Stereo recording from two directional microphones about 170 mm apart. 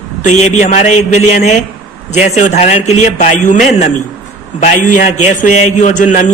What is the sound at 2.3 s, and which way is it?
A man's voice, 40° left (ahead or behind).